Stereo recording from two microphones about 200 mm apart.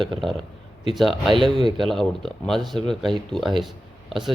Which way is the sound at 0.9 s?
Centre (ahead or behind).